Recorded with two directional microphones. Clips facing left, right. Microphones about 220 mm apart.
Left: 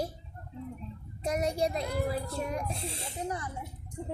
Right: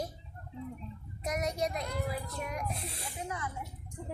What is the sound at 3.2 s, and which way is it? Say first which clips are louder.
Speech: left 4 dB; 35° left (ahead or behind).